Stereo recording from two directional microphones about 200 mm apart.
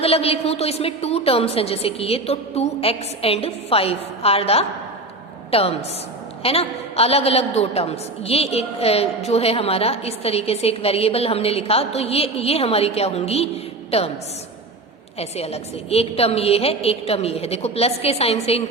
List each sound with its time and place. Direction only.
0.0 s a woman's voice: 30° left (ahead or behind)
15.2 s a woman's voice: 30° left (ahead or behind)